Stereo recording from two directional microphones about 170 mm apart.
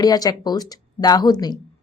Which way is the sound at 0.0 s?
20° left (ahead or behind).